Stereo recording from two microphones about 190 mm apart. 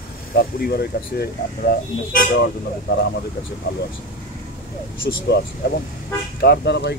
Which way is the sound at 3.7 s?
70° left (ahead or behind).